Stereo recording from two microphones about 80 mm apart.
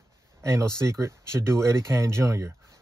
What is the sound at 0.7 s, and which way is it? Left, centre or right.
Speech, right.